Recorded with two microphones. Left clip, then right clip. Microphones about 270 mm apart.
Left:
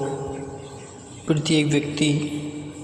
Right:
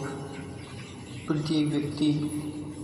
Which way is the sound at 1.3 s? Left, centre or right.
Left.